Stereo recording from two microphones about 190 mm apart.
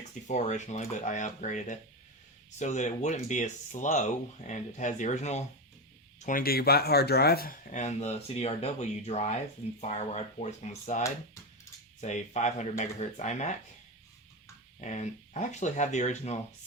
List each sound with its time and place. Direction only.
0.3 s speech: 40° left (ahead or behind)
14.8 s speech: 40° left (ahead or behind)